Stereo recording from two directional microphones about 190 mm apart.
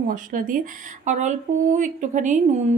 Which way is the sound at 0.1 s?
45° right (ahead or behind).